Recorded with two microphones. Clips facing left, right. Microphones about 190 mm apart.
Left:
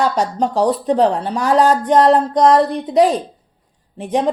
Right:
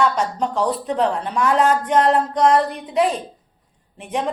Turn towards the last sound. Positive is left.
turn(degrees=35)  # may be behind; listen again after turning